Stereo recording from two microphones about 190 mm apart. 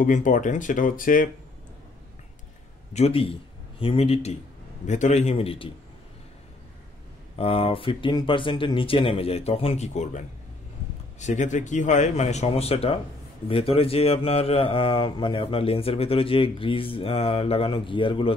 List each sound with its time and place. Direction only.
0.0 s speech: 45° left (ahead or behind)
2.9 s speech: 30° left (ahead or behind)
7.3 s speech: 30° left (ahead or behind)